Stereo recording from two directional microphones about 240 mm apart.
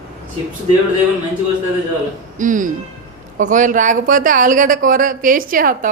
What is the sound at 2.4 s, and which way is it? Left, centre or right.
Speech, right.